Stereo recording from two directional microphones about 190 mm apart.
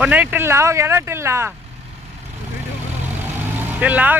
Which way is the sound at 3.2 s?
10° right (ahead or behind).